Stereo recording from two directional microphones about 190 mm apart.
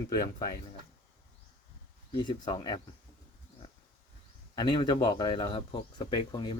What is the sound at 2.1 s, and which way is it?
Speech, 25° left (ahead or behind).